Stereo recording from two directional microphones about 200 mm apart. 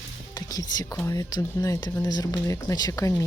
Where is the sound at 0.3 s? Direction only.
20° left (ahead or behind).